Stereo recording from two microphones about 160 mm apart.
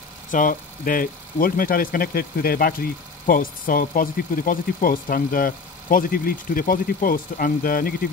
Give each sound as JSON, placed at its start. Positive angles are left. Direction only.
{"t": 0.3, "sound": "speech", "side_deg": 60}